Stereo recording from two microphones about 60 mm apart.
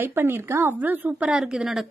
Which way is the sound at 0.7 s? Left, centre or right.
Right.